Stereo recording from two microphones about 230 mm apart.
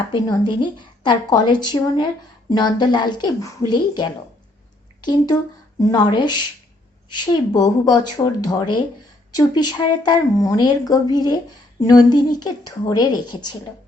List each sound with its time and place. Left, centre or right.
0.3 s a woman's voice: centre